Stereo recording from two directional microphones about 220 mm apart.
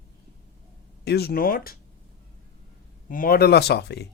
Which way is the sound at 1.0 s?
45° left (ahead or behind).